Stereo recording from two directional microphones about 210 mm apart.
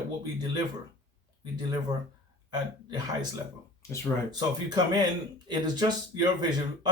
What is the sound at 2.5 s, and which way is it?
Speech, 20° right (ahead or behind).